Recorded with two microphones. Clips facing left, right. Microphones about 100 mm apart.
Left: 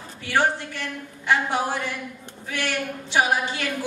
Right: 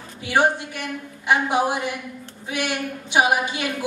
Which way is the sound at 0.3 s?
15° right (ahead or behind).